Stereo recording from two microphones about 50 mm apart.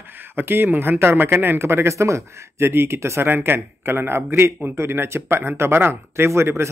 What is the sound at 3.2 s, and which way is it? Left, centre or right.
Speech, right.